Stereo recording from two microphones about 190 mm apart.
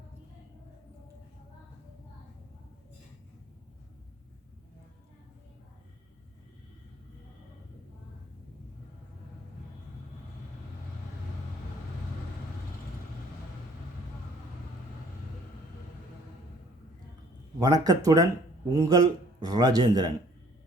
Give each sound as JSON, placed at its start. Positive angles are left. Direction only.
{"t": 17.6, "sound": "a man's voice", "side_deg": -20}